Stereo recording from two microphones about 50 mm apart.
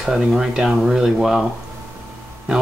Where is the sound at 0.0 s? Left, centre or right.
Centre.